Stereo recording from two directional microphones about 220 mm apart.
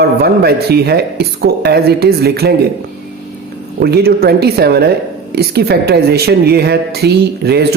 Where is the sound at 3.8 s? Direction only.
45° right (ahead or behind).